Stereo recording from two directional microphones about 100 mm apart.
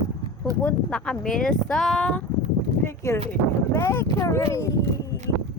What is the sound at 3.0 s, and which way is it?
Speech, 30° left (ahead or behind).